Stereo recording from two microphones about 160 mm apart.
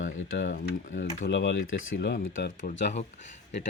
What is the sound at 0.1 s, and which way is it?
Speech, 50° left (ahead or behind).